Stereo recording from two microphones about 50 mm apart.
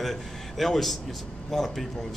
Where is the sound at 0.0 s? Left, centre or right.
Centre.